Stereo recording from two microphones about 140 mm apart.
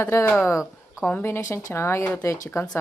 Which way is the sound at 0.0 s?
20° left (ahead or behind).